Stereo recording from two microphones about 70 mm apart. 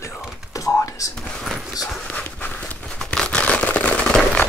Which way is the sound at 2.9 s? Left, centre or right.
Centre.